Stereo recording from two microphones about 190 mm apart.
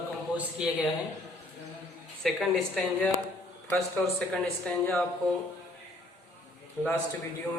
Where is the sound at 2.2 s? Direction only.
Centre (ahead or behind).